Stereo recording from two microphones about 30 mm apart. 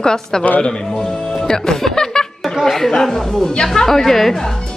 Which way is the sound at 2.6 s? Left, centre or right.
Centre.